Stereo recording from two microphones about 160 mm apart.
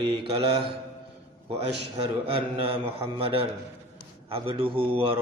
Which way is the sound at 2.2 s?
35° right (ahead or behind).